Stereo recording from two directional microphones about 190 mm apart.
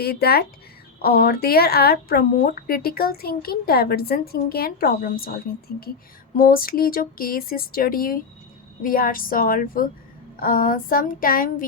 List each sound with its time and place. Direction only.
0.0 s speech: 55° left (ahead or behind)